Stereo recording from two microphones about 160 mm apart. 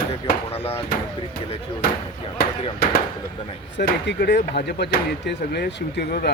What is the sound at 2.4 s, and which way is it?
Speech, 75° left (ahead or behind).